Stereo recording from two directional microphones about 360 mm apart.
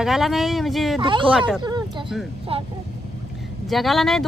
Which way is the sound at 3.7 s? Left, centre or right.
Centre.